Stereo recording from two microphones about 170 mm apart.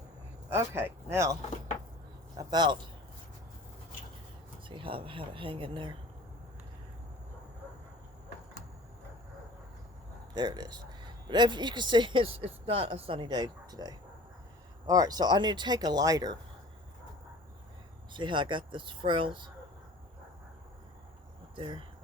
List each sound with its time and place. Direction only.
0.5 s speech: 15° right (ahead or behind)
2.4 s speech: 25° right (ahead or behind)
4.7 s speech: 30° right (ahead or behind)
10.3 s speech: 25° right (ahead or behind)
18.1 s speech: 30° right (ahead or behind)
21.5 s speech: 30° right (ahead or behind)